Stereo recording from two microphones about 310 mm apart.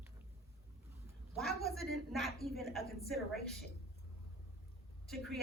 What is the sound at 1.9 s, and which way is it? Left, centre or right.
A woman's voice, centre.